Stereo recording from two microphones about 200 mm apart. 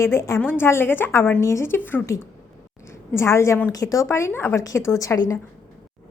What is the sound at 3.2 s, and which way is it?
A woman's voice, 15° left (ahead or behind).